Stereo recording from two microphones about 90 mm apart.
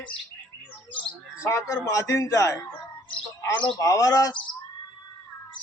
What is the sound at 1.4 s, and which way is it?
Speech, 35° left (ahead or behind).